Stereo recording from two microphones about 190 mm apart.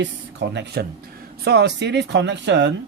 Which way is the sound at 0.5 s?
60° right (ahead or behind).